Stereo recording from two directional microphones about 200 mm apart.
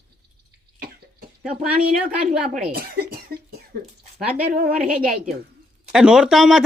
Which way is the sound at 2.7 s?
50° right (ahead or behind).